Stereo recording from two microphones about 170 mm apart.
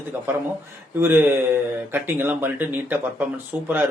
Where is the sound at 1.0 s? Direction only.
15° right (ahead or behind).